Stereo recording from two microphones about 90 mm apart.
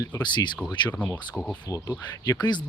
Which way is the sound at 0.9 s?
20° left (ahead or behind).